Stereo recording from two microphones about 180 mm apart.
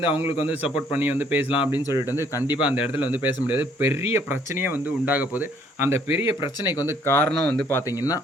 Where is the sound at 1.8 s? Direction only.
20° left (ahead or behind).